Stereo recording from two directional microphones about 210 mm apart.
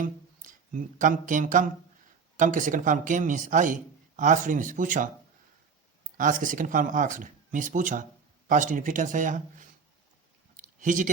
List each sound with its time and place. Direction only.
0.0 s a sound: 40° right (ahead or behind)
2.4 s speech: 40° right (ahead or behind)
6.1 s speech: 40° right (ahead or behind)
10.6 s clicking: 40° right (ahead or behind)